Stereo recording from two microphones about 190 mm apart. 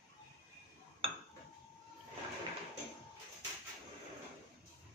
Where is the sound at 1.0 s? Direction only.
30° right (ahead or behind).